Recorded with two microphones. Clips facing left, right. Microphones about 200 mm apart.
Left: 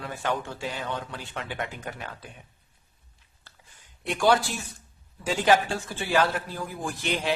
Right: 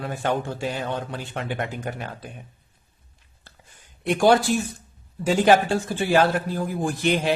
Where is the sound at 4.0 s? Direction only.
45° right (ahead or behind).